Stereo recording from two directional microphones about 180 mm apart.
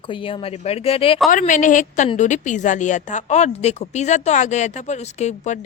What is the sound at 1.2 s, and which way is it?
A woman's voice, 45° left (ahead or behind).